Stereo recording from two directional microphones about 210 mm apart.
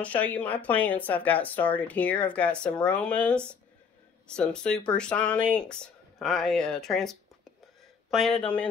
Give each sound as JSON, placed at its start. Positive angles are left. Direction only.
{"t": 0.0, "sound": "speech", "side_deg": 5}